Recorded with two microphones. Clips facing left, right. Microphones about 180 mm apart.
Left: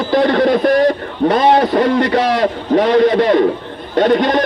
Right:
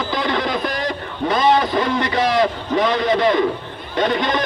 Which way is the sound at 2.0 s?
60° left (ahead or behind).